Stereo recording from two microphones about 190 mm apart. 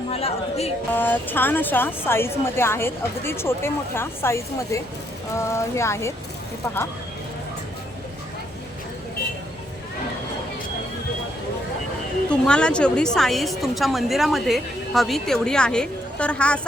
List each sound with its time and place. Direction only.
0.1 s speech: 30° left (ahead or behind)
0.9 s a woman's voice: 10° left (ahead or behind)
12.3 s a woman's voice: 5° left (ahead or behind)